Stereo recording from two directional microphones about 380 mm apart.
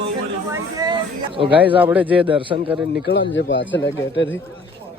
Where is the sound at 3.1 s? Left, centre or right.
Left.